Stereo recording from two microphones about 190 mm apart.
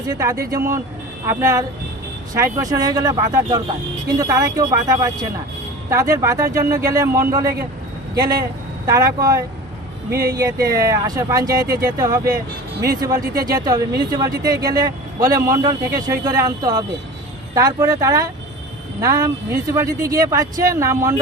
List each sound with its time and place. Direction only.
0.1 s speech: 20° right (ahead or behind)
8.9 s speech: 20° right (ahead or behind)